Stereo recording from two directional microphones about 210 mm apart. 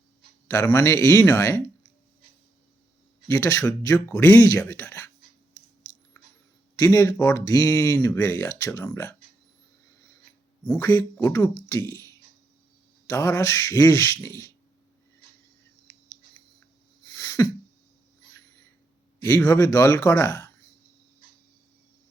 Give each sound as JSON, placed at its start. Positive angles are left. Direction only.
{"t": 0.4, "sound": "speech", "side_deg": 15}
{"t": 3.2, "sound": "speech", "side_deg": 15}
{"t": 6.7, "sound": "speech", "side_deg": 15}
{"t": 10.7, "sound": "speech", "side_deg": 15}
{"t": 17.1, "sound": "sneeze", "side_deg": 15}
{"t": 19.2, "sound": "speech", "side_deg": 15}